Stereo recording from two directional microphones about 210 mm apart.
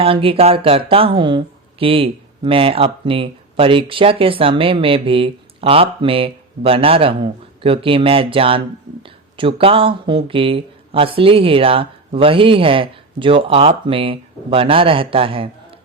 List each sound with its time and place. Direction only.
0.0 s speech: 25° right (ahead or behind)